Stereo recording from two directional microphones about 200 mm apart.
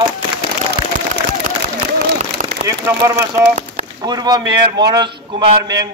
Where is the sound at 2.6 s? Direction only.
15° right (ahead or behind).